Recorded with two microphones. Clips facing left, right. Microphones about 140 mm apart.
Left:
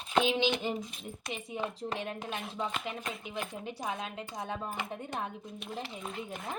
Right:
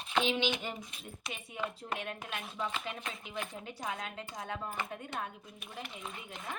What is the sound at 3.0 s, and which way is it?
Speech, 35° left (ahead or behind).